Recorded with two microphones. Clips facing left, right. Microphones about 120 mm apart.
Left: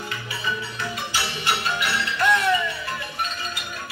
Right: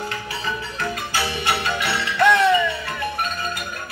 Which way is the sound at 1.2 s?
65° right (ahead or behind).